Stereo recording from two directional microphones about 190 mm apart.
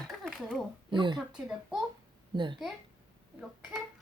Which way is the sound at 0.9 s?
25° right (ahead or behind).